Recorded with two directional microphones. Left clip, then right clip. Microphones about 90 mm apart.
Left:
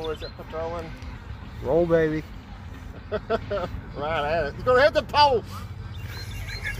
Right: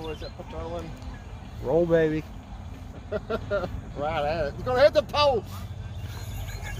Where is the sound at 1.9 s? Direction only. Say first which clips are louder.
Left 1 dB; 35° left (ahead or behind).